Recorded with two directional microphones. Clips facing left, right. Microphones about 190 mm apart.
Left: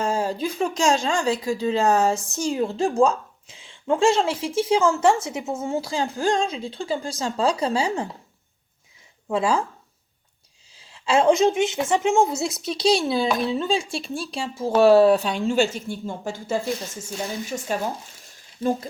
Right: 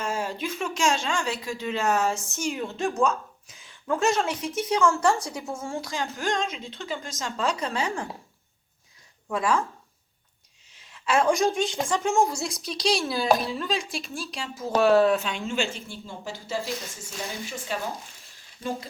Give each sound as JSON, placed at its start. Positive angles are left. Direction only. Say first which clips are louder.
{"t": 0.0, "sound": "speech", "louder": "left 6 dB", "side_deg": 35}
{"t": 9.3, "sound": "speech", "louder": "left 3 dB", "side_deg": 30}
{"t": 10.8, "sound": "a woman's voice", "louder": "left 3 dB", "side_deg": 30}
{"t": 17.1, "sound": "speech", "louder": "left 6 dB", "side_deg": 40}